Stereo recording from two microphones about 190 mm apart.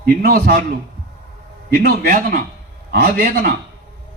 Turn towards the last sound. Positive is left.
turn(degrees=-50)  # may be behind; listen again after turning